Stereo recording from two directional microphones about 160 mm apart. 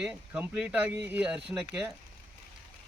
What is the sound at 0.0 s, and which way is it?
Speech, 10° right (ahead or behind).